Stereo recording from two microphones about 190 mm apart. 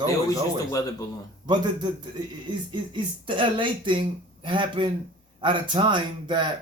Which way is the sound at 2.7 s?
25° right (ahead or behind).